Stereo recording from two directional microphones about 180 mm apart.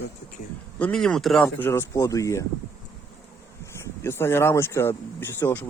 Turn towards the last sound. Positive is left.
turn(degrees=10)  # may be behind; listen again after turning